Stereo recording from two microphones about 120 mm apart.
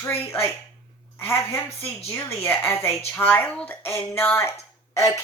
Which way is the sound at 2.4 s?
15° left (ahead or behind).